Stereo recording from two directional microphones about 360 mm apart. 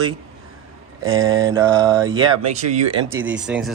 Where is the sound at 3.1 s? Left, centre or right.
Centre.